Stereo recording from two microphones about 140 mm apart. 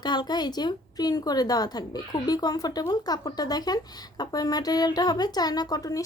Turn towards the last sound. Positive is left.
turn(degrees=25)  # may be behind; listen again after turning